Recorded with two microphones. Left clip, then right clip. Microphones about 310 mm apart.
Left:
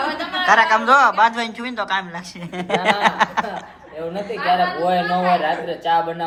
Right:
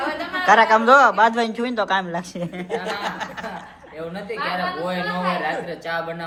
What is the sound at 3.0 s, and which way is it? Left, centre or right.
Chuckle, left.